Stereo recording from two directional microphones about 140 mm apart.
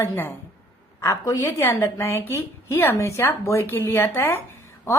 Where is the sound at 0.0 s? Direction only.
15° left (ahead or behind).